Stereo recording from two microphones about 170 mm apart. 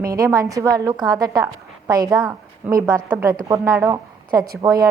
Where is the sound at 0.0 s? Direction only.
20° right (ahead or behind).